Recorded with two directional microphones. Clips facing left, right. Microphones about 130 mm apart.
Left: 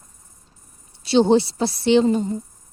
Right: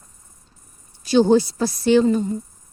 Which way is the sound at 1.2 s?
25° left (ahead or behind).